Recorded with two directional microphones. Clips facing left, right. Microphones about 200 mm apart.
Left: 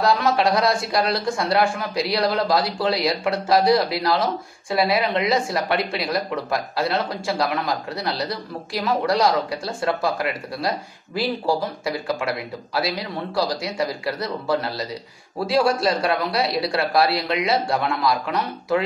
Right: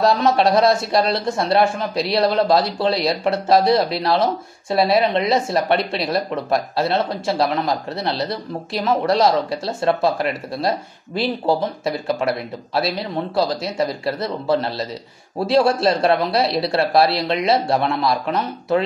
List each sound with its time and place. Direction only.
0.0 s speech: 25° right (ahead or behind)